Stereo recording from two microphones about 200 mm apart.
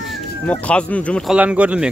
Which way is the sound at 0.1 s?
5° left (ahead or behind).